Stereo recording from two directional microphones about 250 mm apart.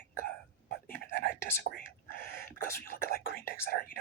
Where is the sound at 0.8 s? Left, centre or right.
Left.